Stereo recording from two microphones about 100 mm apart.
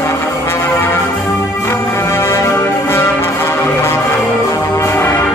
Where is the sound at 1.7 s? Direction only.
25° left (ahead or behind).